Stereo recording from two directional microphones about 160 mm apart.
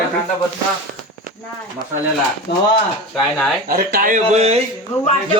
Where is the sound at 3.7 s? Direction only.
65° right (ahead or behind); by 4.6 s 40° right (ahead or behind).